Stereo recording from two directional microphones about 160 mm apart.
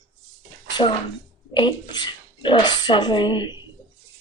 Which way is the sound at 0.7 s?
25° left (ahead or behind).